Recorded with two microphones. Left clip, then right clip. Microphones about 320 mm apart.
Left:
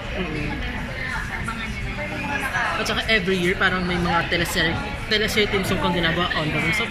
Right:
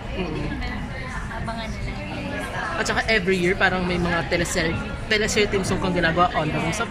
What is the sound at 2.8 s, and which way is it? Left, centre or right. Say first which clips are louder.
Speech: even; right.